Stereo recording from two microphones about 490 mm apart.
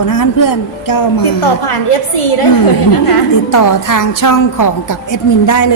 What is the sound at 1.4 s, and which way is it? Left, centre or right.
Speech, left.